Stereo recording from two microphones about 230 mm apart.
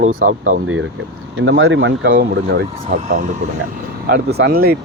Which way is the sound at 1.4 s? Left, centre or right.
Right.